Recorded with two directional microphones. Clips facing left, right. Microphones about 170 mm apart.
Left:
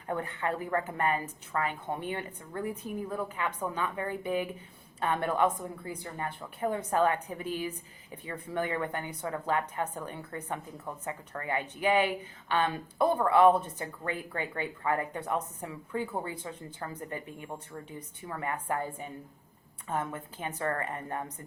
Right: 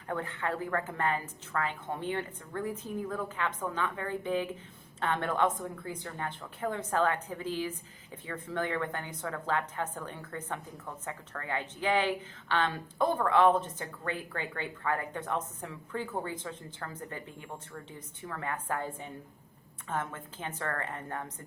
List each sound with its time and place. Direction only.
0.1 s a woman's voice: 15° left (ahead or behind)
18.3 s a woman's voice: 15° left (ahead or behind)